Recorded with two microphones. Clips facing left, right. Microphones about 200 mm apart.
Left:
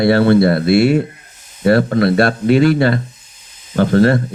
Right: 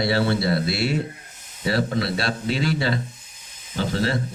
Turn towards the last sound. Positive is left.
turn(degrees=55)  # may be behind; listen again after turning